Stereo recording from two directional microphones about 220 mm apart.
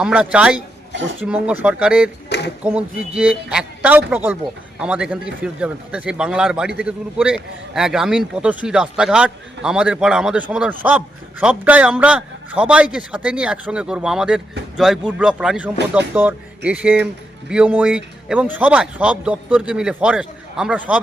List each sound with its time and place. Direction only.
0.0 s speech: 5° right (ahead or behind)
2.3 s a sound: 50° left (ahead or behind)
2.6 s a man's voice: 5° right (ahead or behind)